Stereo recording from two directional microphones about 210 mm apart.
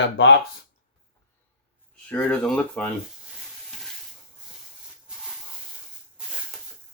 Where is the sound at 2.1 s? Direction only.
5° left (ahead or behind).